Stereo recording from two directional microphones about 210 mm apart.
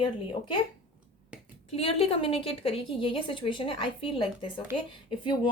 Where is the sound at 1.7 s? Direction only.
25° left (ahead or behind).